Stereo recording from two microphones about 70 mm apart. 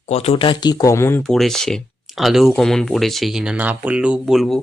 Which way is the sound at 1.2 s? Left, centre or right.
Centre.